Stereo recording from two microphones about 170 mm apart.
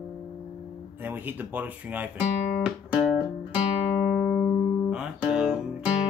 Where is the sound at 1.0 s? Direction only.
10° right (ahead or behind).